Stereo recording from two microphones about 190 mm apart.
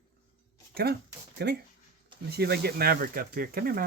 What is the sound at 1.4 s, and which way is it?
Speech, 60° right (ahead or behind).